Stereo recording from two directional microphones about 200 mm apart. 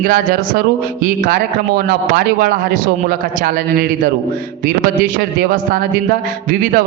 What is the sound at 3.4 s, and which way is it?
Speech, 45° right (ahead or behind).